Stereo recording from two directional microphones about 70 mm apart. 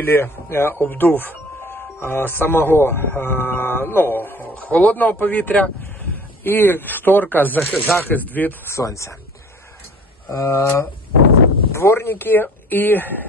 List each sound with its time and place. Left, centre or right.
0.0 s speech: left
8.6 s speech: left
10.3 s speech: left
11.7 s speech: left